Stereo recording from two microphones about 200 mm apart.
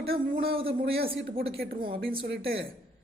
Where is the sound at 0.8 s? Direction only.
50° right (ahead or behind).